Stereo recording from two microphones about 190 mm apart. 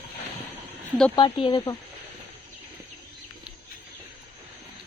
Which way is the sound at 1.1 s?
25° left (ahead or behind).